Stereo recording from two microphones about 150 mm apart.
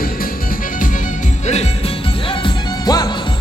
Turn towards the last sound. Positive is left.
turn(degrees=25)  # may be behind; listen again after turning